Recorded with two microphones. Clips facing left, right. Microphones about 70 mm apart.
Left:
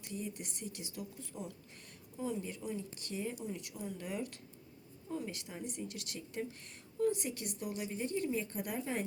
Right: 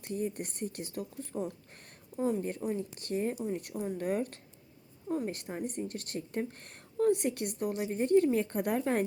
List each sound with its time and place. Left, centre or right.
0.0 s a woman's voice: right